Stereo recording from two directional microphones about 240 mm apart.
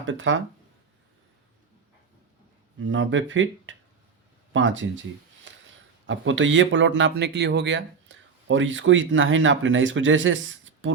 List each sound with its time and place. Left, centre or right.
0.0 s speech: right
2.9 s speech: right
6.1 s speech: right